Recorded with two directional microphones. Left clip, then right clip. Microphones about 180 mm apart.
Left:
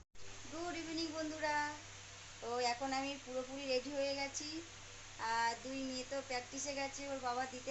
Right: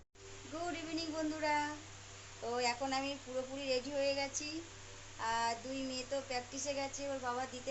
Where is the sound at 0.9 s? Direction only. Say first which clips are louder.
Right 3 dB; 15° right (ahead or behind).